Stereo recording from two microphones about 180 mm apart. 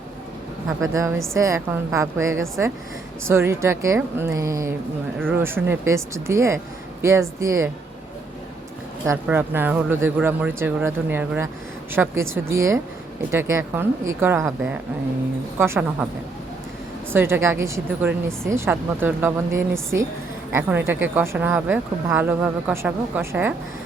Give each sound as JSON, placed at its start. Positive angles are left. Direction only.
{"t": 0.8, "sound": "speech", "side_deg": -15}
{"t": 9.2, "sound": "speech", "side_deg": -10}
{"t": 17.1, "sound": "speech", "side_deg": -10}